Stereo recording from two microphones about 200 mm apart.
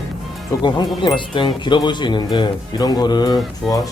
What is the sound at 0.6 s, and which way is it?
Speech, 20° left (ahead or behind).